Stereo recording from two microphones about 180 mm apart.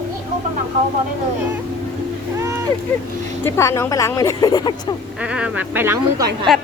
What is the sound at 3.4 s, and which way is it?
Speech, 15° left (ahead or behind).